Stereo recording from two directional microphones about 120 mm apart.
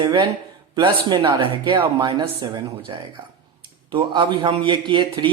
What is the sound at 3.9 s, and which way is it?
A woman's voice, 40° right (ahead or behind).